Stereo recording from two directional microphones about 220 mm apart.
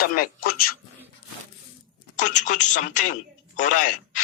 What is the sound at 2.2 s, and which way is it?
Speech, 35° left (ahead or behind).